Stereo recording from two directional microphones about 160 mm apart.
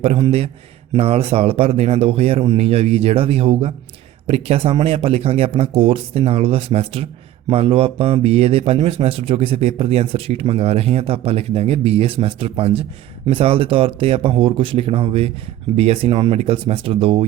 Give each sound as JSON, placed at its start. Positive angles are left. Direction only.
{"t": 0.0, "sound": "speech", "side_deg": -35}